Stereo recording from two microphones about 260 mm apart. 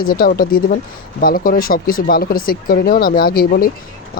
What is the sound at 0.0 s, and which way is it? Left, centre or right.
Speech, left.